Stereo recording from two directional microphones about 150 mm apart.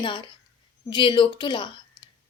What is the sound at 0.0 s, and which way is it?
A woman's voice, 30° left (ahead or behind).